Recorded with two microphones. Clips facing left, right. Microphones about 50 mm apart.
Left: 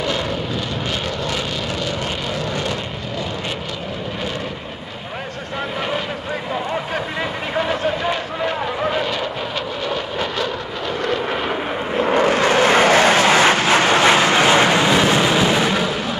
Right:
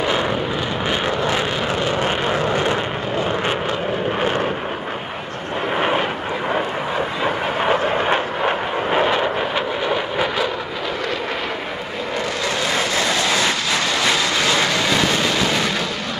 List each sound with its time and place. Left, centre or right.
1.9 s vehicle: right
5.8 s vehicle: right
7.6 s vehicle: right
9.8 s vehicle: centre
12.0 s vehicle: left; by 15.9 s centre